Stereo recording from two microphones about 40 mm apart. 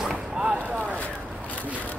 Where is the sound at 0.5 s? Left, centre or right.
Right.